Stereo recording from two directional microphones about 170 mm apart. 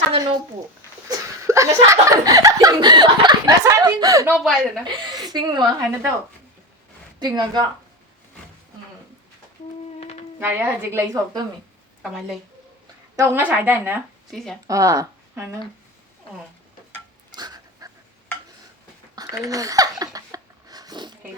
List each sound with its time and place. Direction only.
0.2 s a woman's voice: 25° right (ahead or behind)
4.4 s speech: centre (ahead or behind)
4.9 s speech: 25° right (ahead or behind)
7.2 s a woman's voice: 25° right (ahead or behind)
10.0 s a sound: 40° left (ahead or behind)
10.4 s a woman's voice: 10° right (ahead or behind)
13.1 s a woman's voice: 15° right (ahead or behind)
14.3 s speech: centre (ahead or behind)
14.7 s speech: 20° right (ahead or behind)
17.3 s dog: 25° right (ahead or behind)
19.1 s a sound: 20° right (ahead or behind)